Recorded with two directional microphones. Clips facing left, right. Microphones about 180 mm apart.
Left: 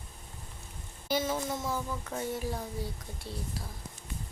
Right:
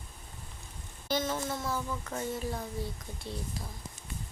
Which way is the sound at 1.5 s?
15° left (ahead or behind).